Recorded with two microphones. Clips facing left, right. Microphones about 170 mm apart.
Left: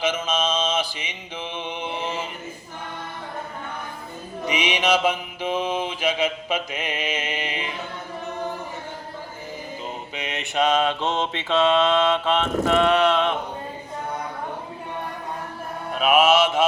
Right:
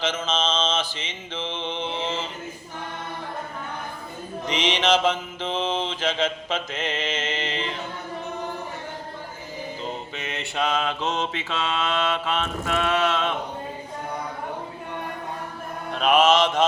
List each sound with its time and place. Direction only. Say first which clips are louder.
0.0 s mantra: left 2 dB; 10° left (ahead or behind)
4.4 s mantra: even; 10° left (ahead or behind)
10.2 s mantra: left 5 dB; 15° left (ahead or behind)
15.9 s mantra: left 1 dB; 5° left (ahead or behind)